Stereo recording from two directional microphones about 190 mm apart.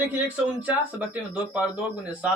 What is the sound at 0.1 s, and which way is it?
Speech, 10° right (ahead or behind).